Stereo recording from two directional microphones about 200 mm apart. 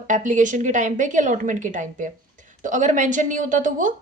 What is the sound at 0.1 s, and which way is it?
Speech, 40° right (ahead or behind).